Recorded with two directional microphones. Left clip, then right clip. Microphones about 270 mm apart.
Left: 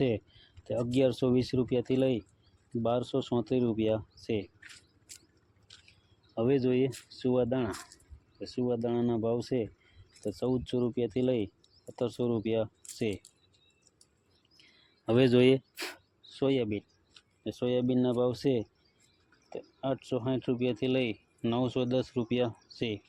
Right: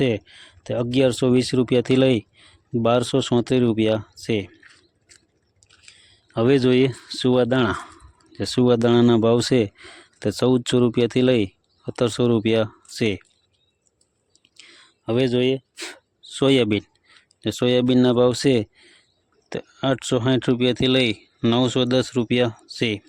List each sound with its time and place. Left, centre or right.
0.0 s speech: right
4.6 s a sound: centre
6.3 s speech: right
14.5 s whispering: right
15.0 s speech: centre; by 23.0 s right